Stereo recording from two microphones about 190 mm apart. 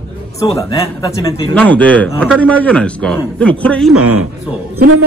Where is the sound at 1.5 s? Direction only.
5° left (ahead or behind).